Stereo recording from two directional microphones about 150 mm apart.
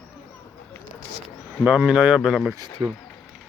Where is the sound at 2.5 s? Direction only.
25° right (ahead or behind).